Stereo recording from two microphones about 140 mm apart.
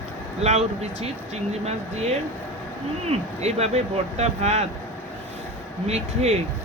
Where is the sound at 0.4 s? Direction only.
50° right (ahead or behind).